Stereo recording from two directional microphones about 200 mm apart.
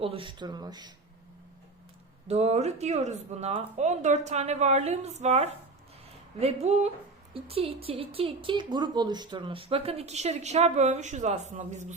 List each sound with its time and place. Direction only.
0.0 s a woman's voice: 25° right (ahead or behind)
2.2 s a woman's voice: 35° right (ahead or behind)